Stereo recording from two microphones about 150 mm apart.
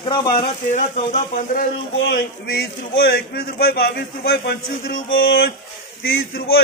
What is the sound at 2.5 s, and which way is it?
A man's voice, 90° left.